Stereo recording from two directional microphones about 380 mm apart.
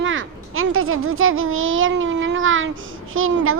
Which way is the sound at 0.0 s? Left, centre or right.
Right.